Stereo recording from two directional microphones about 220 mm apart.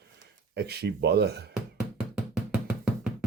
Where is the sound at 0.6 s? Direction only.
50° right (ahead or behind).